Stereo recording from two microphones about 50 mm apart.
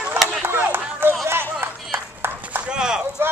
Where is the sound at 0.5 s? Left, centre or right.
Right.